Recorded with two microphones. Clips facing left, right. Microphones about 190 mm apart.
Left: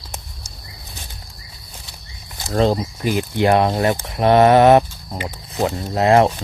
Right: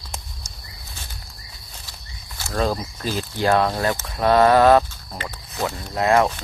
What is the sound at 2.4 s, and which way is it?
Speech, 25° left (ahead or behind).